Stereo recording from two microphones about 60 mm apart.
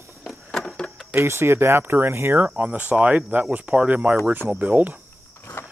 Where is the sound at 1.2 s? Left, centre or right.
Right.